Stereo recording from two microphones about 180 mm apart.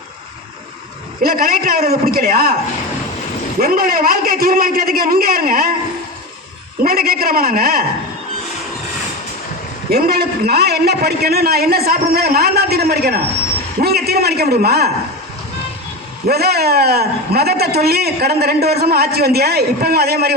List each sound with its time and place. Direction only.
1.2 s a man's voice: 55° right (ahead or behind)
3.6 s a man's voice: 55° right (ahead or behind)
6.8 s a man's voice: 55° right (ahead or behind)
9.9 s a man's voice: 60° right (ahead or behind)
16.2 s a man's voice: 60° right (ahead or behind)